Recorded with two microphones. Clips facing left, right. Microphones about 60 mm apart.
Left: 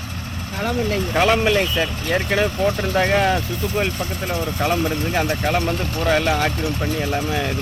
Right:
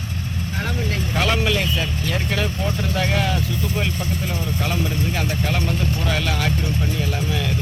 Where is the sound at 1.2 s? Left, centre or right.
Left.